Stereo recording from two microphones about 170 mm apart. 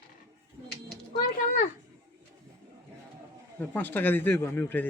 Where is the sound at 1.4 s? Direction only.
45° left (ahead or behind).